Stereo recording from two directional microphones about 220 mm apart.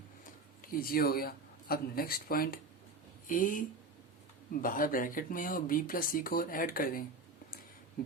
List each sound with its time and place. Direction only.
0.6 s speech: 40° left (ahead or behind)
4.6 s speech: 40° left (ahead or behind)